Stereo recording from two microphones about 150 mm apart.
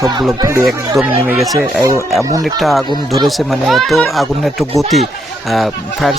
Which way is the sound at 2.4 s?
Centre (ahead or behind).